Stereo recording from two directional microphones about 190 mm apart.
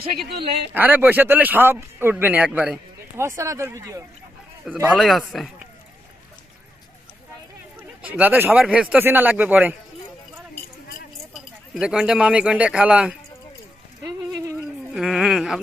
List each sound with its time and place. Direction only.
0.7 s speech: 10° right (ahead or behind)
8.0 s speech: 10° right (ahead or behind)
11.3 s speech: centre (ahead or behind)
14.0 s a sound: 15° right (ahead or behind)
14.9 s speech: centre (ahead or behind)